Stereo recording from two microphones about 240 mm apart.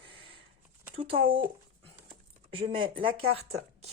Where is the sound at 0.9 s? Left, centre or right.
Right.